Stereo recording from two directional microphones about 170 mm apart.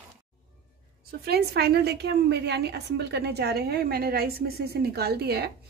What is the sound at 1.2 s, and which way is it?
A woman's voice, 70° right (ahead or behind).